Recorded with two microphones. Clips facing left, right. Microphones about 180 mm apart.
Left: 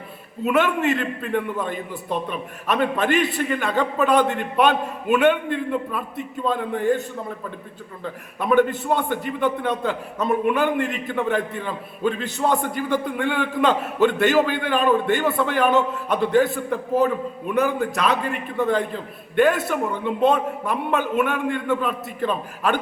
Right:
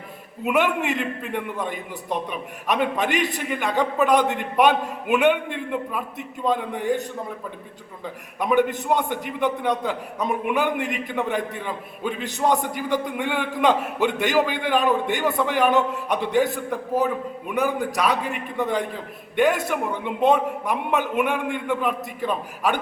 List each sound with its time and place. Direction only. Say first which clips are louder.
0.4 s a man's voice: left 2 dB; 10° right (ahead or behind)
6.4 s a man's voice: left 1 dB; 15° right (ahead or behind)
8.0 s a man's voice: left 1 dB; 15° right (ahead or behind)
17.5 s a man's voice: left 2 dB; 10° right (ahead or behind)